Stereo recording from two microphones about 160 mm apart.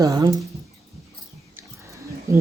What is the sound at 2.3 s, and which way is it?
Speech, 20° right (ahead or behind).